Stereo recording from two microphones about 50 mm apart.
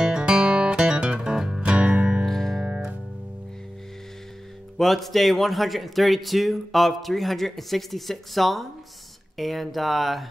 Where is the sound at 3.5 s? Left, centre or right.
Centre.